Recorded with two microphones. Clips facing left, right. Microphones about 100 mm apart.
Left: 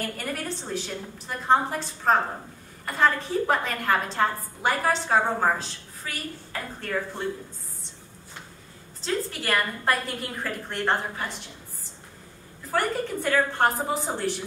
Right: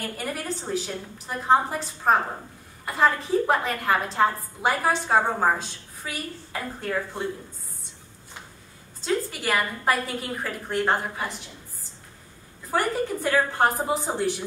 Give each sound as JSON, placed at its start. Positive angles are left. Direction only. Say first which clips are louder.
{"t": 0.2, "sound": "a woman's voice", "louder": "right 1 dB", "side_deg": -5}
{"t": 9.0, "sound": "a woman's voice", "louder": "right 2 dB", "side_deg": -5}
{"t": 12.7, "sound": "a woman's voice", "louder": "right 1 dB", "side_deg": -5}